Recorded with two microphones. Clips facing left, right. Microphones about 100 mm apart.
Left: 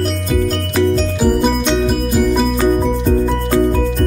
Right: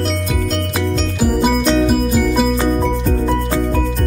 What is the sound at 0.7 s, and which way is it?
Music, 5° right (ahead or behind).